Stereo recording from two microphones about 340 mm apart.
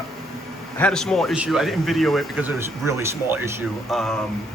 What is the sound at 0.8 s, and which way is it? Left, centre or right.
A man's voice, centre.